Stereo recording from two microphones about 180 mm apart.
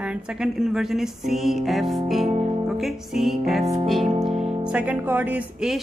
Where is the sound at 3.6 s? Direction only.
35° right (ahead or behind).